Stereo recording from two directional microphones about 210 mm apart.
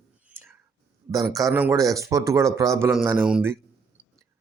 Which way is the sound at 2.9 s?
5° right (ahead or behind).